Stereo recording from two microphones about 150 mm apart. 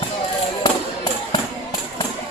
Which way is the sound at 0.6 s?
30° left (ahead or behind).